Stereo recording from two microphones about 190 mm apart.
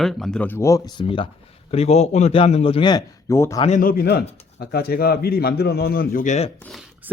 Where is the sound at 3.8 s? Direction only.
50° left (ahead or behind).